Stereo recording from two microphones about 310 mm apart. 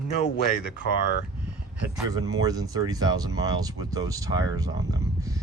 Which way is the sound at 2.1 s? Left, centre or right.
Centre.